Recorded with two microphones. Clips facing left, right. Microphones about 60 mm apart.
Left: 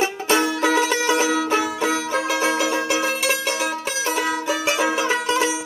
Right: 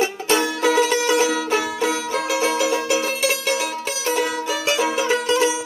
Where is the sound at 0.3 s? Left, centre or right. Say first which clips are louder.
Even; centre.